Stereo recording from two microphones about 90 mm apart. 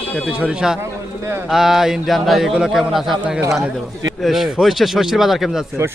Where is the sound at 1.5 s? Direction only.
5° right (ahead or behind).